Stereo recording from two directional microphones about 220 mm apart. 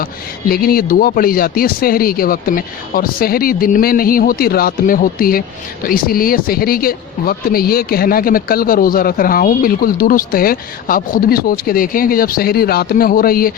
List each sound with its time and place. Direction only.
0.0 s speech: 40° left (ahead or behind)